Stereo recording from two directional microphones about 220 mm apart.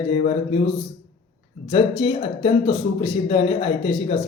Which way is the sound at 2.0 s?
25° left (ahead or behind).